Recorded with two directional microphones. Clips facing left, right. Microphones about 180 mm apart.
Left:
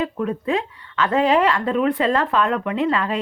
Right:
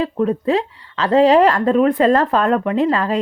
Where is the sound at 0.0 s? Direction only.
35° right (ahead or behind).